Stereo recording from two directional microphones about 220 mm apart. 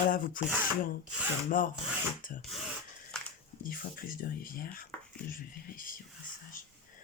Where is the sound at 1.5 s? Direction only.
40° left (ahead or behind).